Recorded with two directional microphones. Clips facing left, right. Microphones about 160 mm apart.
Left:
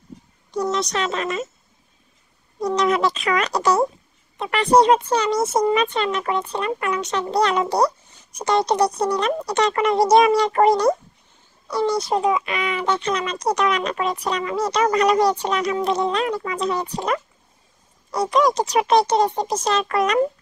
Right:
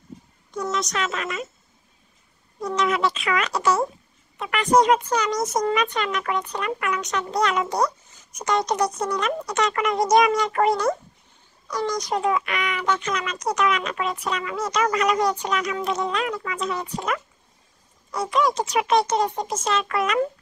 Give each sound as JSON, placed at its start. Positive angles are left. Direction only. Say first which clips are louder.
{"t": 0.6, "sound": "speech", "louder": "left 4 dB", "side_deg": 35}
{"t": 2.6, "sound": "speech", "louder": "left 4 dB", "side_deg": 35}
{"t": 12.1, "sound": "speech", "louder": "left 3 dB", "side_deg": 20}